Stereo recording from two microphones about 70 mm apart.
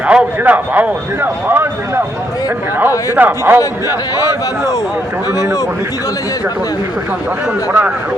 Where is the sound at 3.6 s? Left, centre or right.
Left.